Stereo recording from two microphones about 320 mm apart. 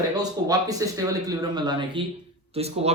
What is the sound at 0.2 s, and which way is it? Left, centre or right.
A man's voice, centre.